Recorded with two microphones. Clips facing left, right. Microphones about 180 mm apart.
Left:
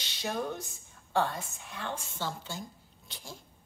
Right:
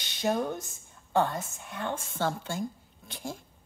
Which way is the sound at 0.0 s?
50° right (ahead or behind).